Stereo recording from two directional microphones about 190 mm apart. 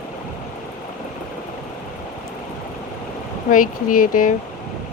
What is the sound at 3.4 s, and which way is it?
Speech, 45° left (ahead or behind).